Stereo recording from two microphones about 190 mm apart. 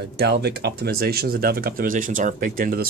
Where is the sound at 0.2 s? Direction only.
60° right (ahead or behind).